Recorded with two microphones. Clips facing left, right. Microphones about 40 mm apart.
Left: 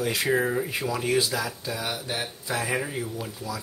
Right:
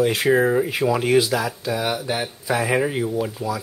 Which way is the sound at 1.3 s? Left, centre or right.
Right.